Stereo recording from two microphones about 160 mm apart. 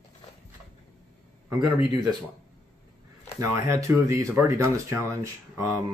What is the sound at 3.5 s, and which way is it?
Speech, 20° right (ahead or behind).